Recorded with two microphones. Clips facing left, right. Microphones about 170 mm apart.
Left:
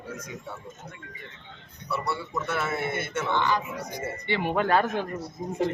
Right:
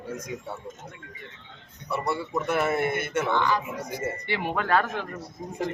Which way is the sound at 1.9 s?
15° right (ahead or behind).